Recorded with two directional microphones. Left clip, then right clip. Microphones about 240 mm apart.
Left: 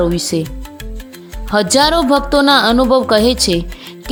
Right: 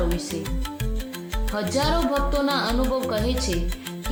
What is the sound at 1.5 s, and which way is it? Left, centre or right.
A woman's voice, left.